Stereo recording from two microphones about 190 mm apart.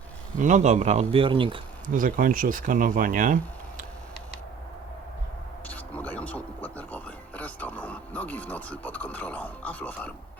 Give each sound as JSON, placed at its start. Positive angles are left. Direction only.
{"t": 0.3, "sound": "a man's voice", "side_deg": -40}
{"t": 1.9, "sound": "speech", "side_deg": -45}
{"t": 5.6, "sound": "a sound", "side_deg": 10}